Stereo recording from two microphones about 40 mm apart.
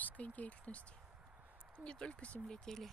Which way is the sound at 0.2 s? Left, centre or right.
Left.